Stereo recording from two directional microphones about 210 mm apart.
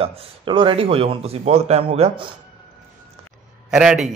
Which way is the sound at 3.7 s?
5° right (ahead or behind).